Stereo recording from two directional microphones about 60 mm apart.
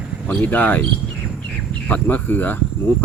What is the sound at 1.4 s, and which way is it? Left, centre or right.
Bird, left.